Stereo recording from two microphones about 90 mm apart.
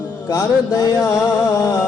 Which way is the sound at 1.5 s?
35° left (ahead or behind).